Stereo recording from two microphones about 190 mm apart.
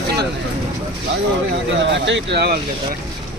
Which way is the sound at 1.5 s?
70° right (ahead or behind).